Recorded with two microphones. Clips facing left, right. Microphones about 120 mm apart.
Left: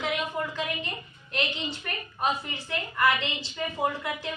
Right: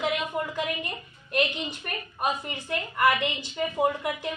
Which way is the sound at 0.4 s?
15° right (ahead or behind).